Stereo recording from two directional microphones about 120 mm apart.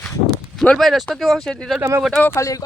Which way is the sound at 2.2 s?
25° left (ahead or behind).